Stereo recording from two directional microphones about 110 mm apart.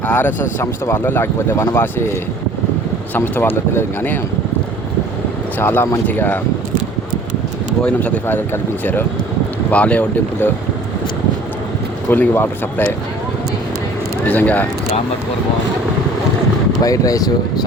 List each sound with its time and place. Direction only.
0.1 s speech: 15° left (ahead or behind)
3.2 s speech: 20° left (ahead or behind)
5.5 s speech: 20° left (ahead or behind)
7.9 s speech: 10° left (ahead or behind)
12.1 s speech: 20° left (ahead or behind)
14.3 s speech: 15° left (ahead or behind)
16.8 s speech: 30° left (ahead or behind)